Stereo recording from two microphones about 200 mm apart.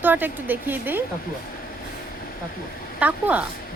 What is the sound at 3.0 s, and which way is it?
Speech, 10° right (ahead or behind).